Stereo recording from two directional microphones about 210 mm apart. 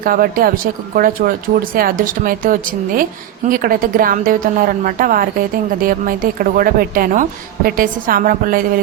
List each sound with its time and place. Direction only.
0.0 s a woman's voice: 40° right (ahead or behind)